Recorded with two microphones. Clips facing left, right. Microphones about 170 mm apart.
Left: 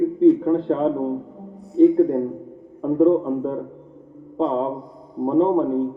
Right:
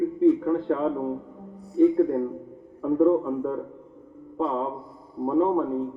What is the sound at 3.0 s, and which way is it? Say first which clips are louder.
Speech: left 4 dB; 25° left (ahead or behind).